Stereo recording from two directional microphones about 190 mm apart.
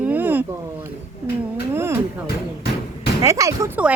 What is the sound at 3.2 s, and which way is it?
Speech, 15° right (ahead or behind).